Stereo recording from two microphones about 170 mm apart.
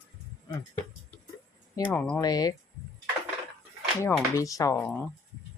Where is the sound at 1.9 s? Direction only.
10° left (ahead or behind).